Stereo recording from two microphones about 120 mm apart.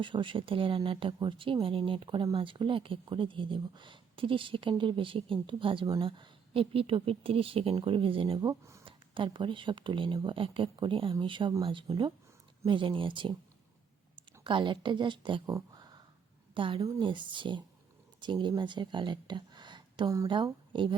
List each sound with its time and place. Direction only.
0.0 s speech: 45° right (ahead or behind)
8.4 s speech: 25° right (ahead or behind)
8.8 s speech: 45° right (ahead or behind)
14.4 s a woman's voice: 45° right (ahead or behind)
15.5 s a sound: 35° right (ahead or behind)
16.6 s speech: 45° right (ahead or behind)